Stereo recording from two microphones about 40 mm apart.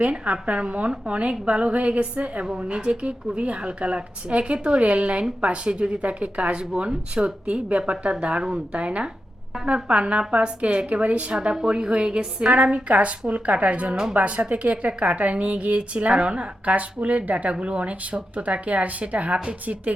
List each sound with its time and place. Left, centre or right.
0.0 s a woman's voice: right